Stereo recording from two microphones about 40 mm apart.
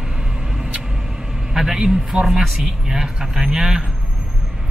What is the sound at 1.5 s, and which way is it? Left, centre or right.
Speech, centre.